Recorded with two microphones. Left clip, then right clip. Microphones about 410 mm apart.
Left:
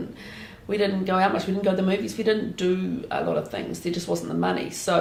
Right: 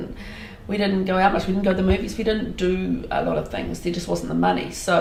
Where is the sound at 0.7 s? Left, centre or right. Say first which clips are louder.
Right 1 dB; left.